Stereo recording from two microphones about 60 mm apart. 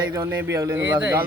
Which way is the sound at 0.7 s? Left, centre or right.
Right.